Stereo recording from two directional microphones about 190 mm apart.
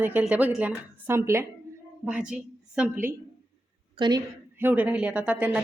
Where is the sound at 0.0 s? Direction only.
10° right (ahead or behind).